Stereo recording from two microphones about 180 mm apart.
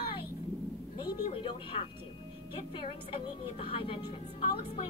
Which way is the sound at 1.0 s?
25° left (ahead or behind).